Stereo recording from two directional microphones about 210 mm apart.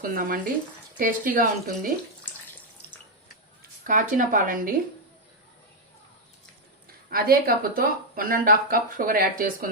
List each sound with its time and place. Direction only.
0.0 s speech: 45° right (ahead or behind)
3.8 s speech: 40° right (ahead or behind)
7.1 s speech: 45° right (ahead or behind)